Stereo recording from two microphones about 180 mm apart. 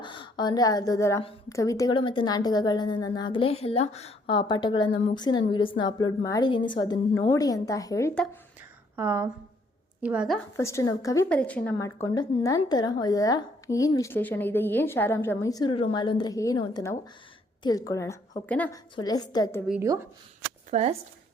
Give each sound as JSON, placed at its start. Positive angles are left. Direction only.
{"t": 0.0, "sound": "a woman's voice", "side_deg": 25}
{"t": 9.0, "sound": "a woman's voice", "side_deg": -15}
{"t": 10.6, "sound": "a woman's voice", "side_deg": 15}
{"t": 11.3, "sound": "a woman's voice", "side_deg": 5}
{"t": 18.7, "sound": "a woman's voice", "side_deg": 20}
{"t": 20.7, "sound": "speech", "side_deg": -35}